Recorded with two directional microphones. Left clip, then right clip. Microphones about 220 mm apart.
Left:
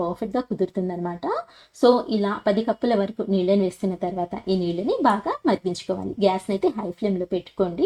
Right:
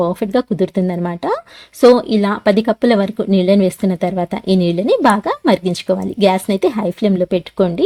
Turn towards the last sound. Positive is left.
turn(degrees=-40)  # may be behind; listen again after turning